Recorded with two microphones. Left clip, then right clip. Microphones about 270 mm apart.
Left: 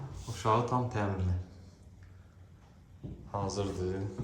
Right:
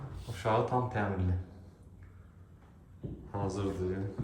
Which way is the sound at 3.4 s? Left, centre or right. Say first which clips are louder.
Even; centre.